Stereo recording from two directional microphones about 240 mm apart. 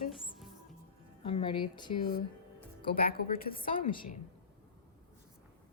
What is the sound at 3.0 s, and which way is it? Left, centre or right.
Speech, left.